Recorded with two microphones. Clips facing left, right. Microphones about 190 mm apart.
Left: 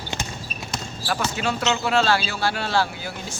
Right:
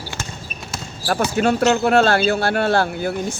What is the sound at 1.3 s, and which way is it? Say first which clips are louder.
Speech: right 11 dB; 50° right (ahead or behind).